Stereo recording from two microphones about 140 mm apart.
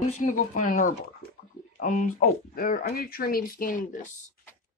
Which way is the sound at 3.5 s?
75° left (ahead or behind).